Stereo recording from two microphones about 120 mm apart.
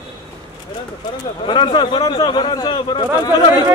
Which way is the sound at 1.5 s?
40° left (ahead or behind).